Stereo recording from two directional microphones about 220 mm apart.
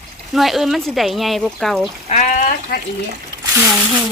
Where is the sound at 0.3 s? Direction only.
Centre (ahead or behind).